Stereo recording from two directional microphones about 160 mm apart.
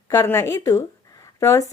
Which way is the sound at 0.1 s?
20° left (ahead or behind).